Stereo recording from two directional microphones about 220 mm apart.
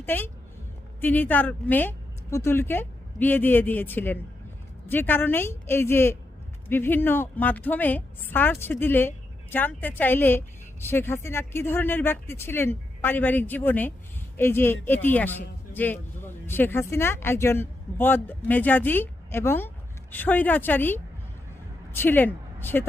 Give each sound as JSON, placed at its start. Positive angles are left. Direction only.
{"t": 0.0, "sound": "a woman's voice", "side_deg": 10}